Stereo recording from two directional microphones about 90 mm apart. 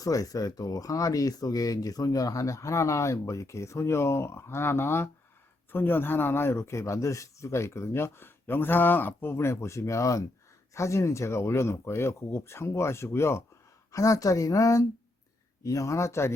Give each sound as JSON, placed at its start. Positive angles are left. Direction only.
{"t": 0.0, "sound": "speech", "side_deg": 40}